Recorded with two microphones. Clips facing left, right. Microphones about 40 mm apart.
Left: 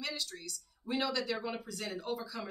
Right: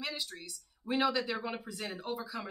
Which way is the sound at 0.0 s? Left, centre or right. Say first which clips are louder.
Even; centre.